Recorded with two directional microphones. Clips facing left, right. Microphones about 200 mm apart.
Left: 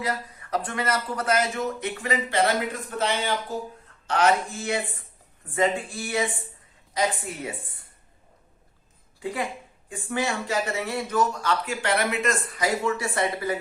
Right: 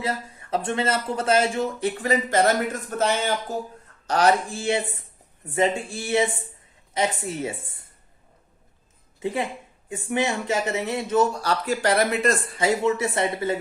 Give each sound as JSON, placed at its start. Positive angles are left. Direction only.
{"t": 0.0, "sound": "speech", "side_deg": -25}
{"t": 9.2, "sound": "speech", "side_deg": -25}